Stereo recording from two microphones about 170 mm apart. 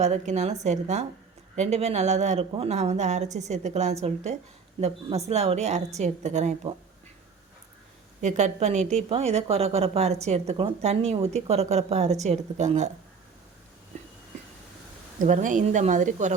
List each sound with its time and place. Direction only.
0.0 s a woman's voice: 45° right (ahead or behind)
8.2 s a woman's voice: 45° right (ahead or behind)
15.2 s a woman's voice: 45° right (ahead or behind)